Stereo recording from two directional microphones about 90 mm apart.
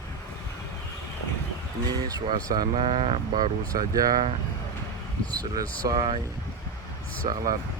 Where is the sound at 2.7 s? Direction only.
90° right.